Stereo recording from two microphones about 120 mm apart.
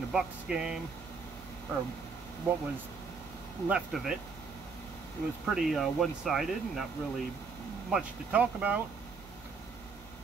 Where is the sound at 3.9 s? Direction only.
Centre (ahead or behind).